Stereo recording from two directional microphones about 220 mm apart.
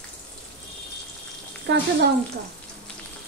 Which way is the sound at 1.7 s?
50° right (ahead or behind).